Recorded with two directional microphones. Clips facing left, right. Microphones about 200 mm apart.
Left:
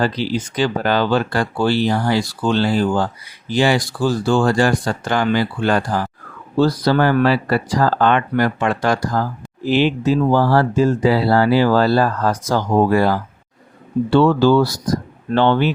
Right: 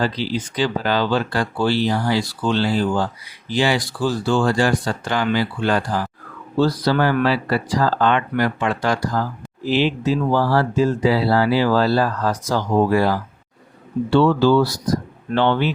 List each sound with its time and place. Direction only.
0.0 s speech: 50° left (ahead or behind)